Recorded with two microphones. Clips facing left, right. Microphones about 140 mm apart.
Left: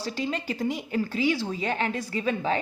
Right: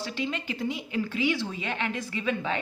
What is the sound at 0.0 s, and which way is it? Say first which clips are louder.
A woman's voice: left 2 dB; 40° left (ahead or behind).